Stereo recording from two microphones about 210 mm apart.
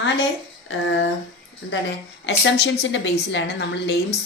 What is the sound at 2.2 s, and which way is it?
A woman's voice, 60° left (ahead or behind).